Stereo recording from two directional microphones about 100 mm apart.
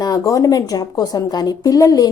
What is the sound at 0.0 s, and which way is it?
A woman's voice, 35° left (ahead or behind).